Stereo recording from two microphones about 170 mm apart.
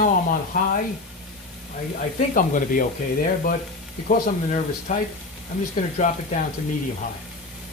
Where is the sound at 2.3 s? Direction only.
50° left (ahead or behind).